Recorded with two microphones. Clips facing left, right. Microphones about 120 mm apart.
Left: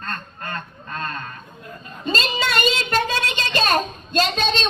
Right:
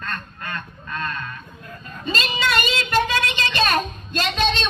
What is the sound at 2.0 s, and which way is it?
Child singing, 35° left (ahead or behind).